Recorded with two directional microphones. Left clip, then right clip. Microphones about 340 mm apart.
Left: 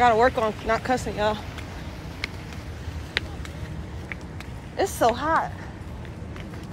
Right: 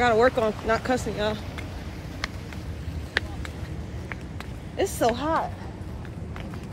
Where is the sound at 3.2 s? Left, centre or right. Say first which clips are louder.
Right 1 dB; centre.